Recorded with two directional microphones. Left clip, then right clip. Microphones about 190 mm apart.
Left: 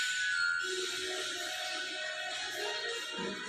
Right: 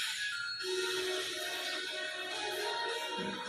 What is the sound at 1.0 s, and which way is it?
Music, 15° left (ahead or behind).